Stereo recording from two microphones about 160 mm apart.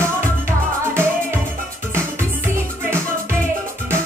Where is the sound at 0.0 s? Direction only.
15° right (ahead or behind).